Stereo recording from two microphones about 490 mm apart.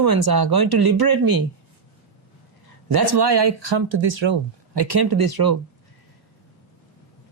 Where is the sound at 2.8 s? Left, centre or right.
Right.